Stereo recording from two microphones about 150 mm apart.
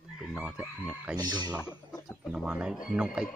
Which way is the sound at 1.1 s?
25° right (ahead or behind).